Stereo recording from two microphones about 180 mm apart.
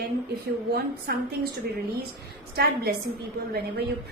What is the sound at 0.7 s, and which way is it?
Speech, 60° right (ahead or behind).